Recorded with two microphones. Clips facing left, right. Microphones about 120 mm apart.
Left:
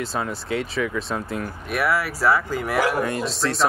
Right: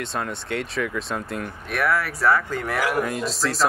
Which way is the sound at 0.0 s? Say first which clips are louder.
Left 2 dB; centre (ahead or behind).